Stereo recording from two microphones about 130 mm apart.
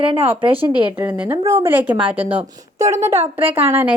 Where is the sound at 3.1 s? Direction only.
50° right (ahead or behind).